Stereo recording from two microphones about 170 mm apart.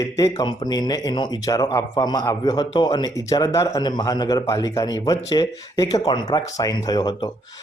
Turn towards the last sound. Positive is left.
turn(degrees=25)  # may be behind; listen again after turning